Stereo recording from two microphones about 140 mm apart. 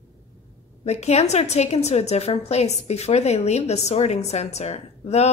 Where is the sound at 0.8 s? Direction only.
50° left (ahead or behind).